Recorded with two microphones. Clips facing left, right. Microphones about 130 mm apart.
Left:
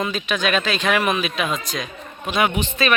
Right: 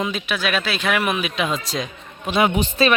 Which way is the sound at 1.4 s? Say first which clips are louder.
Right 1 dB; 30° right (ahead or behind).